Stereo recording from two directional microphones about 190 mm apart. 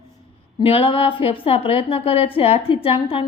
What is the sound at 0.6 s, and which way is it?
A woman's voice, 30° left (ahead or behind).